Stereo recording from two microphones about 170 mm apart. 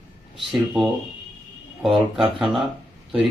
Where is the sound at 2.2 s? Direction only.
5° right (ahead or behind).